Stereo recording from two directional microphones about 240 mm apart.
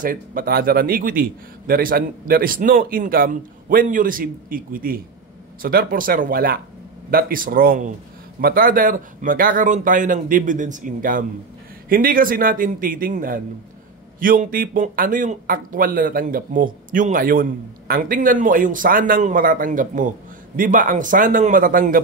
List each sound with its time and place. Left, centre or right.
0.0 s speech: right